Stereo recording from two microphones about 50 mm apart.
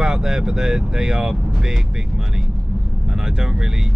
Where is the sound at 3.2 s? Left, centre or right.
Centre.